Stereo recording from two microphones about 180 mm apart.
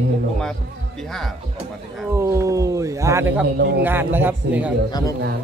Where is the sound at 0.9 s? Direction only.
Centre (ahead or behind).